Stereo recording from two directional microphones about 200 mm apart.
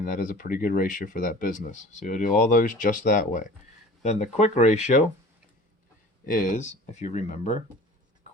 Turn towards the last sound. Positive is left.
turn(degrees=35)  # may be behind; listen again after turning